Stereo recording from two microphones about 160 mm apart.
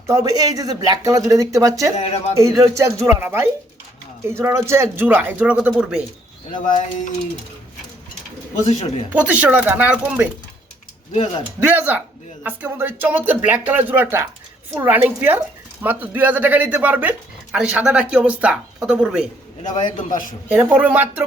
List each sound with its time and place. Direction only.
0.1 s speech: 20° right (ahead or behind)
2.0 s a man's voice: 40° left (ahead or behind)
2.3 s speech: 20° right (ahead or behind)
8.7 s speech: 45° left (ahead or behind)
9.1 s speech: 10° right (ahead or behind)
11.1 s a man's voice: 40° left (ahead or behind)
11.6 s speech: 10° right (ahead or behind)
19.7 s a man's voice: 55° left (ahead or behind)
20.5 s speech: 10° right (ahead or behind)